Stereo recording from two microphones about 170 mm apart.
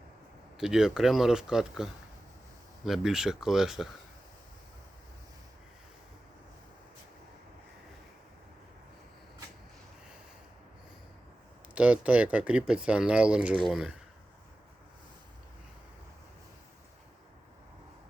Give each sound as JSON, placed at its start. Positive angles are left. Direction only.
{"t": 0.5, "sound": "speech", "side_deg": -5}
{"t": 11.7, "sound": "speech", "side_deg": -10}